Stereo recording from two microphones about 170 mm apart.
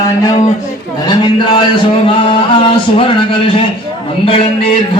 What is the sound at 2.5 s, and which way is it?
A man's voice, 30° left (ahead or behind).